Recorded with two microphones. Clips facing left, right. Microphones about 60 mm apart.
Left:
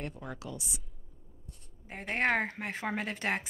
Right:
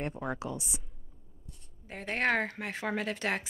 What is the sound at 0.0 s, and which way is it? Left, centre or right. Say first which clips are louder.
Speech: right 6 dB; right.